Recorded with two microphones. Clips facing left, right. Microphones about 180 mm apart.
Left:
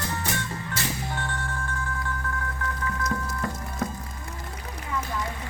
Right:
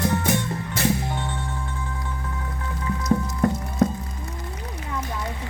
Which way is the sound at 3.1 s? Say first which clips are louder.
Right 13 dB; 55° right (ahead or behind).